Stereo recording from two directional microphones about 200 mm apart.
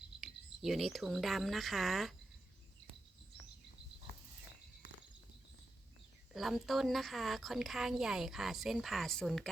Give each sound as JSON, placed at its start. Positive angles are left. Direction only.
{"t": 0.2, "sound": "speech", "side_deg": 0}
{"t": 6.3, "sound": "a woman's voice", "side_deg": 0}